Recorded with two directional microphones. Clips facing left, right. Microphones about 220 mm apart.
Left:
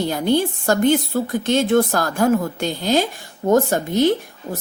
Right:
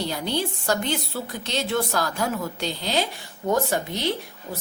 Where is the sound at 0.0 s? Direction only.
50° left (ahead or behind).